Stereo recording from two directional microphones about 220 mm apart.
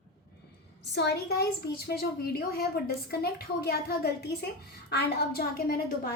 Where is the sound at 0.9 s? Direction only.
50° left (ahead or behind).